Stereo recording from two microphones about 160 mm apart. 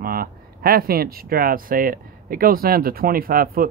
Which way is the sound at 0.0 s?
65° right (ahead or behind).